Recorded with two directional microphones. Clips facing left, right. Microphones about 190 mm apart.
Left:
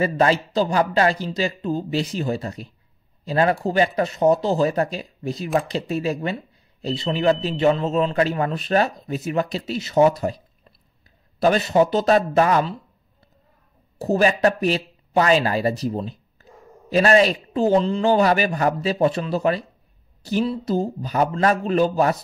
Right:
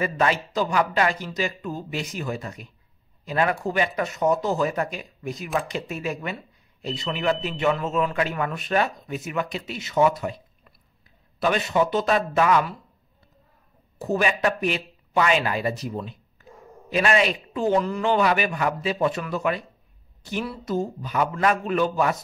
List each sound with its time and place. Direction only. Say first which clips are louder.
0.0 s speech: left 4 dB; 30° left (ahead or behind)
14.0 s speech: left 5 dB; 35° left (ahead or behind)